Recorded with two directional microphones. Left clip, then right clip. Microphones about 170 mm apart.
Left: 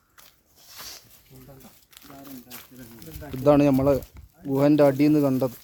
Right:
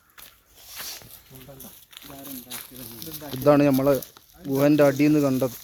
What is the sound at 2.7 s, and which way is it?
Speech, 15° left (ahead or behind).